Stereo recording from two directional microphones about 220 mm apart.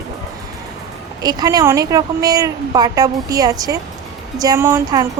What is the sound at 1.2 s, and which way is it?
Speech, 15° right (ahead or behind).